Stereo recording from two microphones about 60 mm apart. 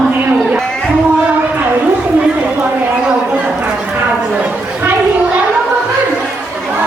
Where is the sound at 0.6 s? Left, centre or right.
Centre.